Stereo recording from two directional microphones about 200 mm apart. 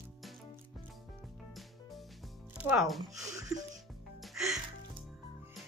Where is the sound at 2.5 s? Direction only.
5° right (ahead or behind).